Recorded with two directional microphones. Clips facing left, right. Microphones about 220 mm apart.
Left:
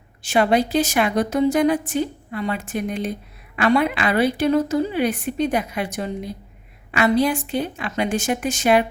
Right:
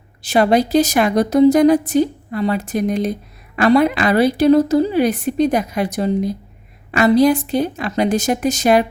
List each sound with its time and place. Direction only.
0.2 s a woman's voice: 40° right (ahead or behind)